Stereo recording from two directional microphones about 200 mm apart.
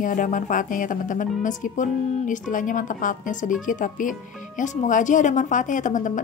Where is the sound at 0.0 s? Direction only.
40° left (ahead or behind).